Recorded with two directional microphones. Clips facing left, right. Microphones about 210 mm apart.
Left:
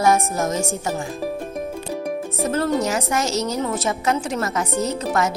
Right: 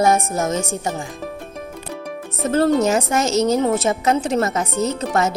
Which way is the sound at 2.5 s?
30° right (ahead or behind).